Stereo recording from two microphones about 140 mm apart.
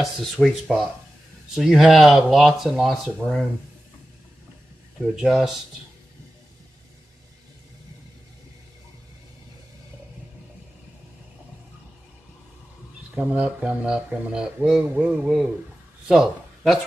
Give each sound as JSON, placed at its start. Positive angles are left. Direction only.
{"t": 0.0, "sound": "speech", "side_deg": 0}
{"t": 5.0, "sound": "speech", "side_deg": -5}
{"t": 13.1, "sound": "speech", "side_deg": -10}